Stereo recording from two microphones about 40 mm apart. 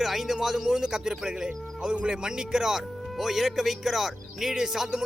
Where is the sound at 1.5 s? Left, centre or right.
Right.